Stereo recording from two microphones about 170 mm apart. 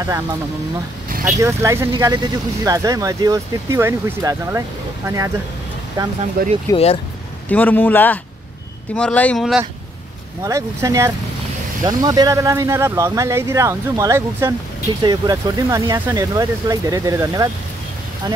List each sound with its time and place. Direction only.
1.2 s speech: 15° right (ahead or behind)
6.4 s speech: 60° right (ahead or behind)
6.7 s speech: 35° left (ahead or behind)
7.4 s a man's voice: 10° left (ahead or behind)
10.4 s speech: 20° right (ahead or behind)